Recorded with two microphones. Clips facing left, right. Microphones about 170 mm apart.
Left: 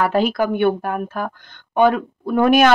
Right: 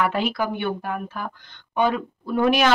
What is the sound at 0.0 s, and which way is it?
Speech, 40° left (ahead or behind).